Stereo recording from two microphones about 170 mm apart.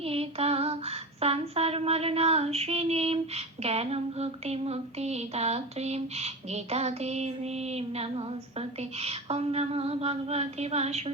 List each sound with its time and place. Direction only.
0.0 s female singing: 35° right (ahead or behind)